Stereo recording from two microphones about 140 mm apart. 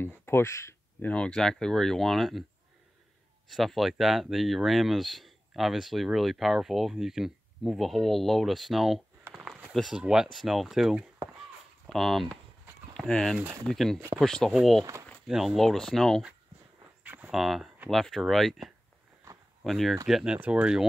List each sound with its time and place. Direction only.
0.0 s a sound: 15° left (ahead or behind)
1.1 s speech: 5° left (ahead or behind)
3.5 s speech: centre (ahead or behind)
13.9 s speech: 20° right (ahead or behind)
14.2 s speech: 5° left (ahead or behind)
17.0 s cricket: 10° right (ahead or behind)
17.4 s speech: centre (ahead or behind)